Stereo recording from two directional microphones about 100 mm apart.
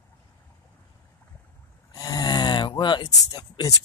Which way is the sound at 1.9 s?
40° left (ahead or behind).